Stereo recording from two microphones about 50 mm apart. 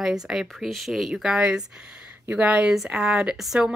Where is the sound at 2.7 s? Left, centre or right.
Centre.